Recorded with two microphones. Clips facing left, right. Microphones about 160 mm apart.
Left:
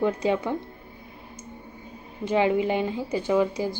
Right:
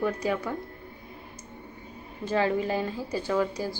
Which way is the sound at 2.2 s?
20° left (ahead or behind).